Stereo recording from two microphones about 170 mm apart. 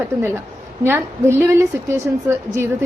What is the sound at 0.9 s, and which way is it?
A woman's voice, 15° right (ahead or behind).